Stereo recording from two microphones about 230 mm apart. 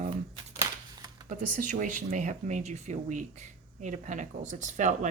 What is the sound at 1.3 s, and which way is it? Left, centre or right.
Speech, right.